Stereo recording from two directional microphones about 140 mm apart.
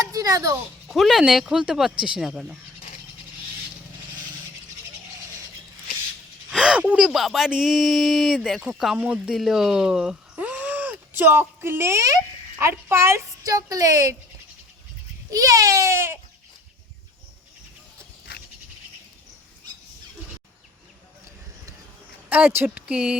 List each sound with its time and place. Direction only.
0.0 s a sound: 25° right (ahead or behind)
0.9 s speech: centre (ahead or behind)
6.5 s speech: 5° right (ahead or behind); by 14.2 s 25° right (ahead or behind)
15.3 s speech: 25° right (ahead or behind)
22.3 s speech: 15° right (ahead or behind)